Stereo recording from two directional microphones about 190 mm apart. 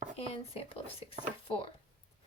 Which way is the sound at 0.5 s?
30° left (ahead or behind).